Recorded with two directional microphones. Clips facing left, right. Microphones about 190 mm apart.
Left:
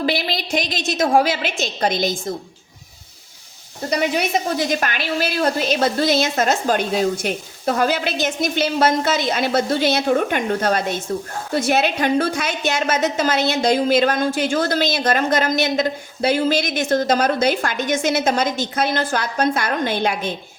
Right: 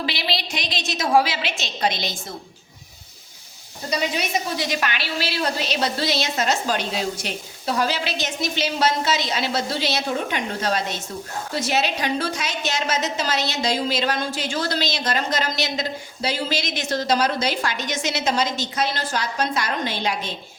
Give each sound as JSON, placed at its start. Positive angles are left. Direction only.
{"t": 0.0, "sound": "a woman's voice", "side_deg": 50}
{"t": 3.8, "sound": "a woman's voice", "side_deg": 55}